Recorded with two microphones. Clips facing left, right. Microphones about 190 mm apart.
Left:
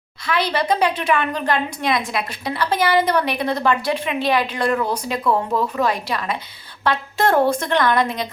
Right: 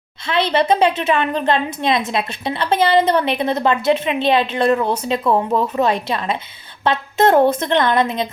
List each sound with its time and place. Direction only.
0.3 s a woman's voice: 25° right (ahead or behind)